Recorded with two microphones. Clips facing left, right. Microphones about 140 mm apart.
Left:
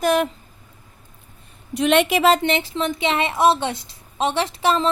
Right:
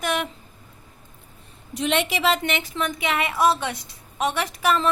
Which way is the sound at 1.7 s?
60° left (ahead or behind).